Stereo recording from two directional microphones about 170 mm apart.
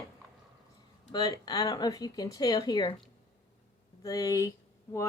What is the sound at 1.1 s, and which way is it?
A woman's voice, 25° left (ahead or behind).